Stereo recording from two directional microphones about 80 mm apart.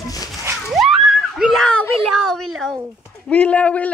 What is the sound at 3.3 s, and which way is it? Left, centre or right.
Speech, centre.